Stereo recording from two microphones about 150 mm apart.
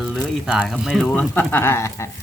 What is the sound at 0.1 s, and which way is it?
Speech, 5° right (ahead or behind).